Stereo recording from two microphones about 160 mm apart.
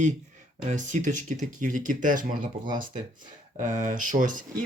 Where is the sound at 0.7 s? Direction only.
50° right (ahead or behind).